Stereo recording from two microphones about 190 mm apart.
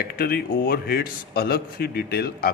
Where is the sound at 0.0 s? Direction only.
55° left (ahead or behind).